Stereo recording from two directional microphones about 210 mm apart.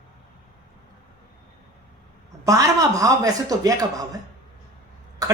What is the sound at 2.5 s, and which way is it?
A man's voice, 15° right (ahead or behind).